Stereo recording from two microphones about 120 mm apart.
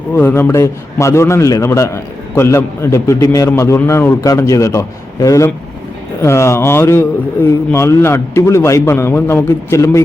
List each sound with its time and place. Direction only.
0.1 s a man's voice: 20° left (ahead or behind)